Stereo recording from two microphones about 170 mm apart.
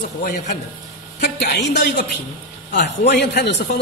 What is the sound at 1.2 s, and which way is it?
A man's voice, 85° left.